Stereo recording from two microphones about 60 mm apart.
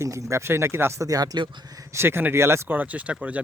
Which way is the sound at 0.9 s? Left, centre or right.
Right.